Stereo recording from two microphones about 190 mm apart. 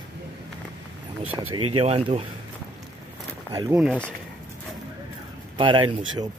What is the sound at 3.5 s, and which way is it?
Speech, 20° right (ahead or behind).